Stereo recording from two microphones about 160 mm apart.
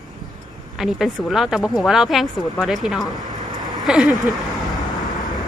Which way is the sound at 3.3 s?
25° right (ahead or behind).